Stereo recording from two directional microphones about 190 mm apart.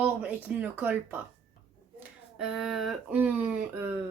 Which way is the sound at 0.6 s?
10° right (ahead or behind).